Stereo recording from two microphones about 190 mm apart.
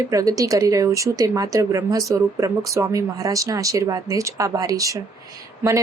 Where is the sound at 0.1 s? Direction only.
20° right (ahead or behind).